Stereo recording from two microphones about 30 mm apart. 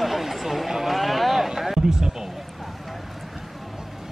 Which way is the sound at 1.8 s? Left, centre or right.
Centre.